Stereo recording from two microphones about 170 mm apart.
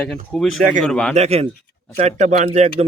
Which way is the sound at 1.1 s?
40° right (ahead or behind).